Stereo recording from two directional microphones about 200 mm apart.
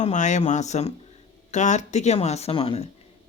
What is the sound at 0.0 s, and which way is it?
Speech, 35° left (ahead or behind).